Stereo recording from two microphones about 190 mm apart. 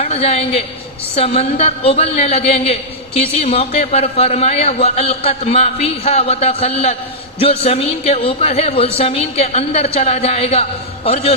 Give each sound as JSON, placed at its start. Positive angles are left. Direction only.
{"t": 0.0, "sound": "a man's voice", "side_deg": 30}